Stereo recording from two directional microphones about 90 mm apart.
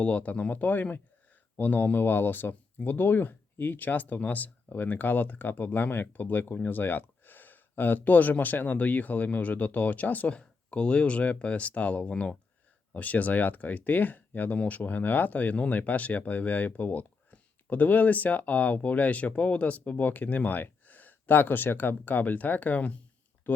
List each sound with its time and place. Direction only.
0.0 s speech: 15° left (ahead or behind)